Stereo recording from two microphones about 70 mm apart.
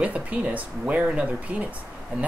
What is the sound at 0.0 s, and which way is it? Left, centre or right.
Speech, right.